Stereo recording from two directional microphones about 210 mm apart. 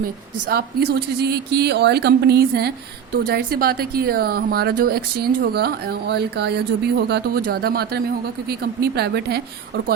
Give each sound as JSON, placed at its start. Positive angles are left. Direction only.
{"t": 0.0, "sound": "speech", "side_deg": -45}